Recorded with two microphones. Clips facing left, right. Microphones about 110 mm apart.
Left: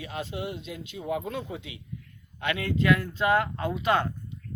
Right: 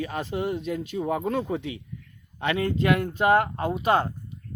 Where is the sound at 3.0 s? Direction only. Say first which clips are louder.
Right 4 dB; 50° right (ahead or behind).